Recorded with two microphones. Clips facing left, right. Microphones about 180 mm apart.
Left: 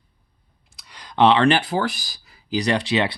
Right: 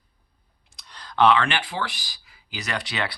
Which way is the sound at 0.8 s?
10° left (ahead or behind).